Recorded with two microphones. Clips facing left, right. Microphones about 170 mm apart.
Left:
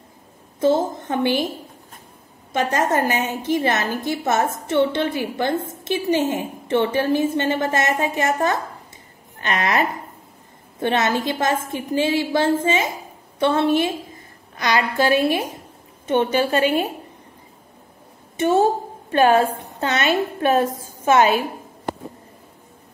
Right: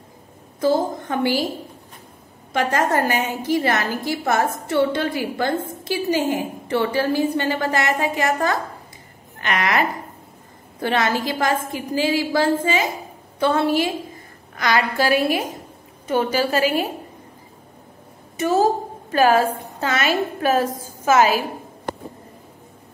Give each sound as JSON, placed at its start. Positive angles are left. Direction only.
{"t": 0.6, "sound": "a woman's voice", "side_deg": 25}
{"t": 2.5, "sound": "a woman's voice", "side_deg": 20}
{"t": 18.4, "sound": "a woman's voice", "side_deg": 25}